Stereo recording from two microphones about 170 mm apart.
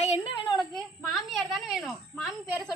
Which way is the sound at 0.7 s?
Centre (ahead or behind).